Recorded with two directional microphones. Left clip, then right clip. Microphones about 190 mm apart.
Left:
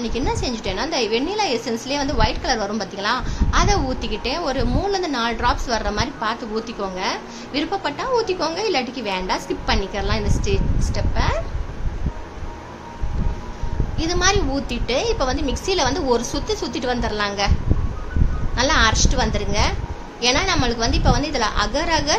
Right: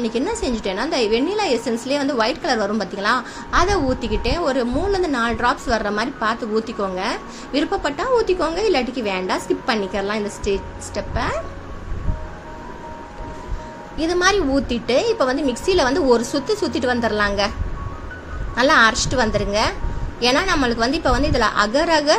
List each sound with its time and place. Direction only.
0.0 s a woman's voice: 20° right (ahead or behind)
13.9 s a woman's voice: 15° right (ahead or behind)
18.6 s a woman's voice: 25° right (ahead or behind)